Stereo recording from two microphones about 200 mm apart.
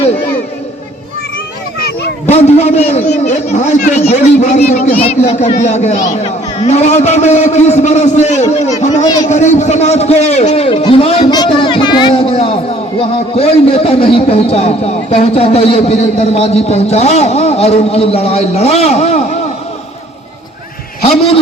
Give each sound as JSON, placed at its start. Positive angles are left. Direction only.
{"t": 2.2, "sound": "a man's voice", "side_deg": 35}
{"t": 9.2, "sound": "a sound", "side_deg": 35}
{"t": 13.0, "sound": "a man's voice", "side_deg": 30}